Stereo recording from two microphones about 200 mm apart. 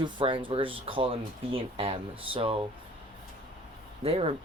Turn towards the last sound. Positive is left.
turn(degrees=-30)  # may be behind; listen again after turning